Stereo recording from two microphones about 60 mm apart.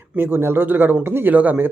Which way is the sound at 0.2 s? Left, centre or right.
Right.